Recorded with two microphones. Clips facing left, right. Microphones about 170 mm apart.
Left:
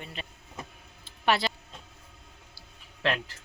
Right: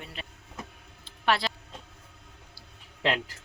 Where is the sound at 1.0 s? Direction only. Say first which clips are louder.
Left 1 dB; centre (ahead or behind).